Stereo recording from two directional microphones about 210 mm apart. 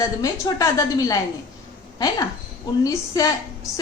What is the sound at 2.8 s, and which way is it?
Speech, 15° left (ahead or behind).